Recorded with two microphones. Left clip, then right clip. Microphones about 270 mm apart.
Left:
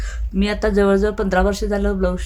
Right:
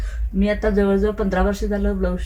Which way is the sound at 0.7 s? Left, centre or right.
Left.